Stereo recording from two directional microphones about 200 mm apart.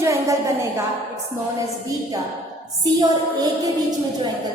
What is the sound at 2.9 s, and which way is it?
Speech, 20° right (ahead or behind).